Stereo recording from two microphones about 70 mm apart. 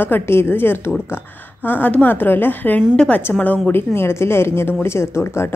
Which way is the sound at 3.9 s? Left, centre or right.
Left.